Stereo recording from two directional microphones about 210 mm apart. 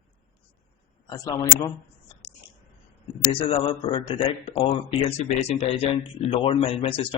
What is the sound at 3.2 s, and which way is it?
Speech, 25° left (ahead or behind).